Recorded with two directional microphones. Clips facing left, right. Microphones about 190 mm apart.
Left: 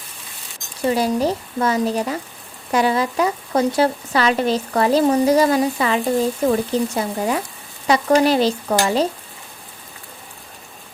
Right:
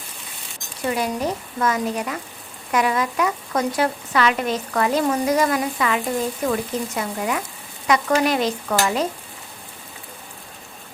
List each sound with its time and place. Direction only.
0.9 s speech: 30° left (ahead or behind)